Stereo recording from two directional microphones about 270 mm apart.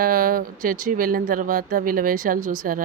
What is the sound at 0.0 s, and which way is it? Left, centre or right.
Speech, right.